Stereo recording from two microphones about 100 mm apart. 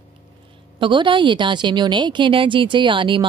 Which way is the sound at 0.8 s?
55° right (ahead or behind).